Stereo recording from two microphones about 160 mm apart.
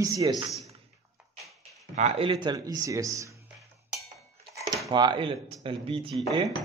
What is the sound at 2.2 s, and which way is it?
A man's voice, 30° right (ahead or behind).